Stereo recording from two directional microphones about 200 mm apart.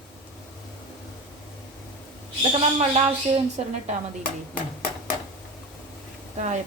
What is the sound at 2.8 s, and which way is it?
Speech, 35° right (ahead or behind).